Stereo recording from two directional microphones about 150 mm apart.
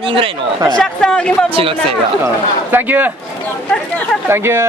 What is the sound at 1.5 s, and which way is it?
Speech, 40° right (ahead or behind).